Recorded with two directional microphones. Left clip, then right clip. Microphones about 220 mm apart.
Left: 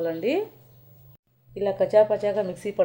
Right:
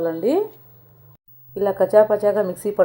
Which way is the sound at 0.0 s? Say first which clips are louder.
Right 4 dB; 55° right (ahead or behind).